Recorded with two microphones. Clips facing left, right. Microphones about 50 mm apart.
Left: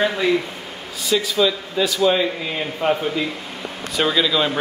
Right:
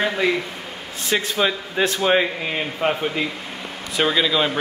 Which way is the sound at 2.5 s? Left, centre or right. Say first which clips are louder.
Left 1 dB; centre.